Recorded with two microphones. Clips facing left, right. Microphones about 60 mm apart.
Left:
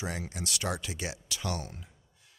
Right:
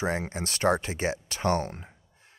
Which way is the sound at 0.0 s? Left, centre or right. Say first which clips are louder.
Right 7 dB; right.